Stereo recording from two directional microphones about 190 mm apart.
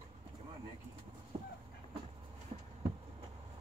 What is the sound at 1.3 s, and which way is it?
Fowl, 30° right (ahead or behind).